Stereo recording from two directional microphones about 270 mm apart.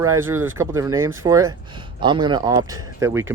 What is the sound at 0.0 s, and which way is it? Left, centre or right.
Speech, centre.